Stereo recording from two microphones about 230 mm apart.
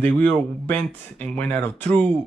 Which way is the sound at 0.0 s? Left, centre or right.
Centre.